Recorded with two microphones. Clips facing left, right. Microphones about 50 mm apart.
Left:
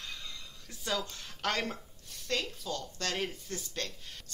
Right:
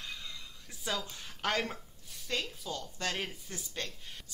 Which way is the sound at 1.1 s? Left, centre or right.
Centre.